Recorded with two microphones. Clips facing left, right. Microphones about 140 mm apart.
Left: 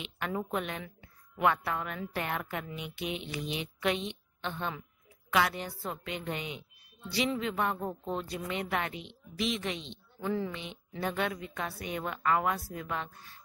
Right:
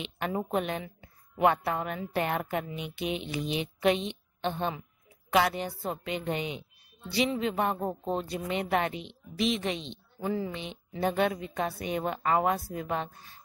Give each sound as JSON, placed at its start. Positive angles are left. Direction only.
{"t": 0.0, "sound": "a woman's voice", "side_deg": -25}